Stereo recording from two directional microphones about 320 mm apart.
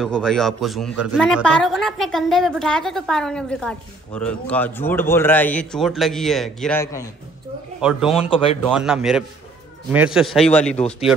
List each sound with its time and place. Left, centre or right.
0.0 s speech: centre
7.8 s speech: centre
8.2 s speech: centre
8.6 s speech: centre